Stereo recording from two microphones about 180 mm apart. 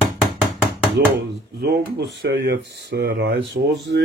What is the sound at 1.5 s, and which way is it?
Speech, 65° right (ahead or behind).